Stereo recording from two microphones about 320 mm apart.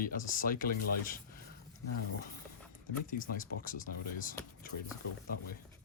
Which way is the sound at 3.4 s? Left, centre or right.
Left.